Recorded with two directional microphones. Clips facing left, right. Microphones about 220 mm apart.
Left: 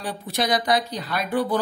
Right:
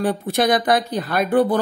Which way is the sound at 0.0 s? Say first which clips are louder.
Right 8 dB; 55° right (ahead or behind).